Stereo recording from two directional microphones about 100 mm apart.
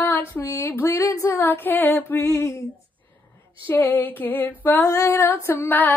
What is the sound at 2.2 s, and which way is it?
Music, 35° left (ahead or behind).